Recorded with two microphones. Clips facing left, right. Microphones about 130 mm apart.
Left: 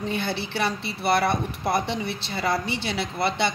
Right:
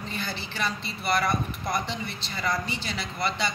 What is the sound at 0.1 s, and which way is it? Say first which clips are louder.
Speech: left 7 dB; 65° left (ahead or behind).